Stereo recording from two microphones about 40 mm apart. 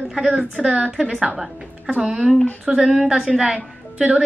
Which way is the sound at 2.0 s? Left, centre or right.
Centre.